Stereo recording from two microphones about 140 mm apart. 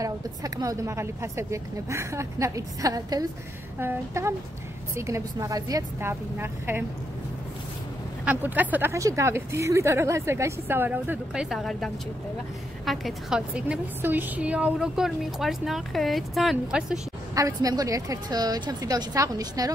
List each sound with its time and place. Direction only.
0.0 s speech: 25° right (ahead or behind)
8.3 s a woman's voice: 10° right (ahead or behind)
17.3 s speech: 25° right (ahead or behind)